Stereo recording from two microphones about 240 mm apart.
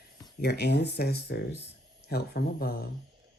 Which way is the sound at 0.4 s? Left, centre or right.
Left.